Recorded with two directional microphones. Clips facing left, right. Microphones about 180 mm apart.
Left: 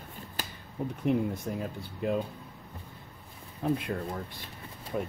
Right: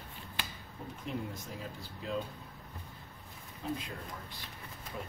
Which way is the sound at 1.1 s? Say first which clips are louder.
Left 11 dB; 60° left (ahead or behind).